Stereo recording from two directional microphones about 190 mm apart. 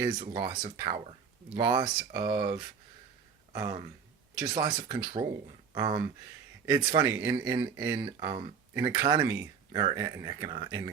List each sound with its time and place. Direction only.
0.0 s speech: 20° right (ahead or behind)
4.4 s speech: 20° right (ahead or behind)